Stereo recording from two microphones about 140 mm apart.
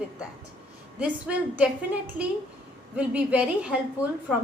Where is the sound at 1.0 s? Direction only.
10° right (ahead or behind).